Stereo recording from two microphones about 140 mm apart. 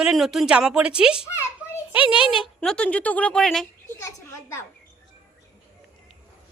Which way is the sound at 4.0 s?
20° left (ahead or behind).